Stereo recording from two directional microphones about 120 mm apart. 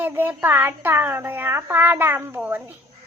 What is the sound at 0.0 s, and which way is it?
A child's voice, 15° right (ahead or behind).